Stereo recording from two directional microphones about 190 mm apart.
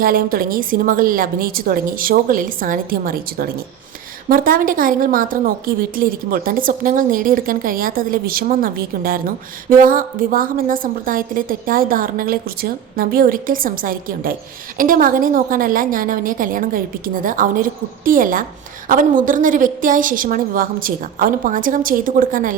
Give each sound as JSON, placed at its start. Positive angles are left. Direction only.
{"t": 0.0, "sound": "a woman's voice", "side_deg": -50}